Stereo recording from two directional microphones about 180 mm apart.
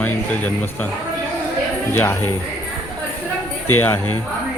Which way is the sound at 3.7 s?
10° left (ahead or behind).